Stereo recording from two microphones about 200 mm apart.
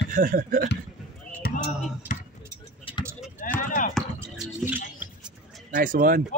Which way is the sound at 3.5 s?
40° left (ahead or behind).